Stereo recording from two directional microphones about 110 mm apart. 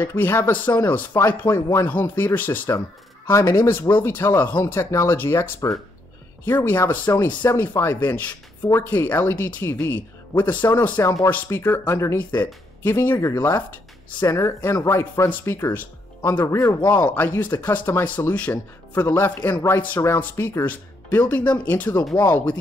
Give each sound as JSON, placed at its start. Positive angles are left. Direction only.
{"t": 0.0, "sound": "speech", "side_deg": 20}
{"t": 17.0, "sound": "speech", "side_deg": 15}